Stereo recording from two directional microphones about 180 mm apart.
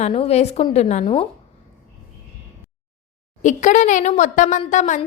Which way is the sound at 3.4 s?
45° left (ahead or behind).